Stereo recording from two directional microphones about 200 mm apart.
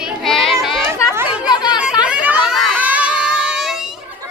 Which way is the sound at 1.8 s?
5° right (ahead or behind).